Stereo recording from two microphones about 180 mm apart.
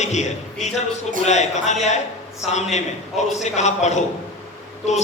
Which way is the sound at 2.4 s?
Centre (ahead or behind).